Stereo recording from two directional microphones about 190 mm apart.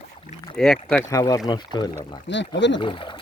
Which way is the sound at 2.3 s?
70° left (ahead or behind).